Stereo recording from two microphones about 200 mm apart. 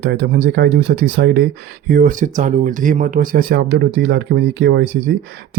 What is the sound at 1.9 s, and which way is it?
Speech, 45° right (ahead or behind).